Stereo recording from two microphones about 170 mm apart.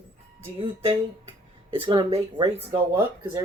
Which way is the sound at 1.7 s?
35° right (ahead or behind).